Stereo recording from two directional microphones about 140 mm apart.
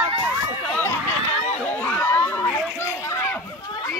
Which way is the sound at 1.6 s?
10° left (ahead or behind).